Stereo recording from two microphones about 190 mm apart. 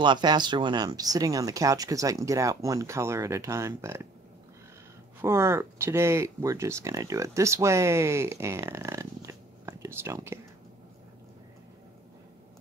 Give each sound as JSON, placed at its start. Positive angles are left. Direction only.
{"t": 0.0, "sound": "speech", "side_deg": -25}
{"t": 5.2, "sound": "speech", "side_deg": -15}